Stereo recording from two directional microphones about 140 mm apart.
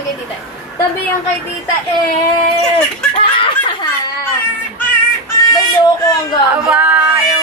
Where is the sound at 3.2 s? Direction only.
35° left (ahead or behind).